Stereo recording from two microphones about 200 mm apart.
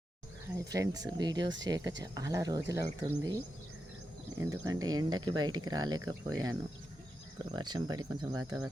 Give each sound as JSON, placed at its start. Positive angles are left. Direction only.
{"t": 0.5, "sound": "speech", "side_deg": -15}
{"t": 4.4, "sound": "speech", "side_deg": -15}